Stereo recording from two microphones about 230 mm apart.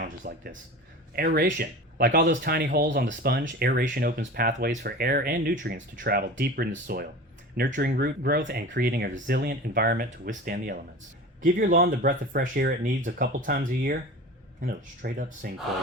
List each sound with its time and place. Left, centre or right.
0.0 s speech: right